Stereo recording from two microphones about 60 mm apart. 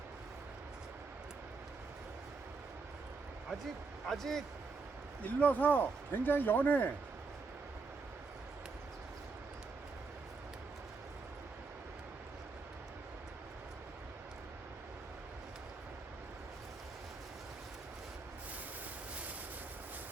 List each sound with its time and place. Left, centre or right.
4.0 s speech: centre
5.2 s speech: left